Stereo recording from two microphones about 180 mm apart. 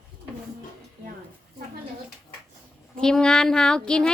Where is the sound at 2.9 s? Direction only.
5° left (ahead or behind).